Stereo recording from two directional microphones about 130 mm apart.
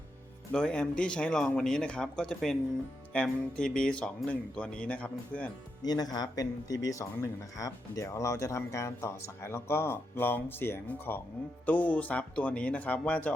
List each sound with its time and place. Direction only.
0.5 s speech: 5° left (ahead or behind)
5.8 s speech: 30° left (ahead or behind); by 13.3 s 10° left (ahead or behind)